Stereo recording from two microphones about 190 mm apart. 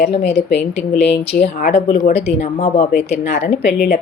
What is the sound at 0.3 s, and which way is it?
Speech, 65° left (ahead or behind).